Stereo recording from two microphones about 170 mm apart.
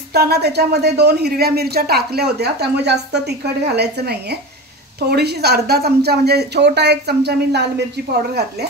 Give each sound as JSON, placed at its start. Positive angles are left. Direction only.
{"t": 0.1, "sound": "speech", "side_deg": -70}